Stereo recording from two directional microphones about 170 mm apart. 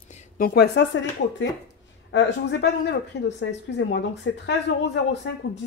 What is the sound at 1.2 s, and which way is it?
Speech, 90° left.